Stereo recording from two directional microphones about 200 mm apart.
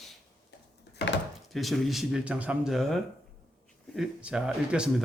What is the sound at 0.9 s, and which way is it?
Wood, 60° left (ahead or behind).